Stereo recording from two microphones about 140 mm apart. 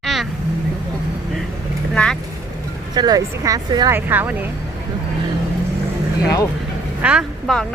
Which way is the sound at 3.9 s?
15° right (ahead or behind).